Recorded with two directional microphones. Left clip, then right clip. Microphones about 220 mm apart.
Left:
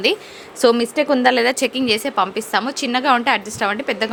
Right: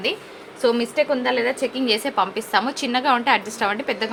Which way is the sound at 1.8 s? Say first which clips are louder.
Even; 25° left (ahead or behind).